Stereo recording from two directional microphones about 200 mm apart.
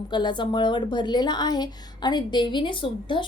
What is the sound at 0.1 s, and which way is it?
A woman's voice, 20° left (ahead or behind).